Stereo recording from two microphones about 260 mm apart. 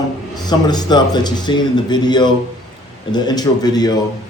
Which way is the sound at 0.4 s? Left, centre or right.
Centre.